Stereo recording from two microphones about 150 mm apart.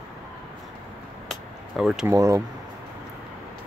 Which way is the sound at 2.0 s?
20° right (ahead or behind).